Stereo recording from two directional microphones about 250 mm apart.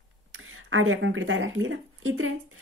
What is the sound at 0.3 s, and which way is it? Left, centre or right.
Speech, right.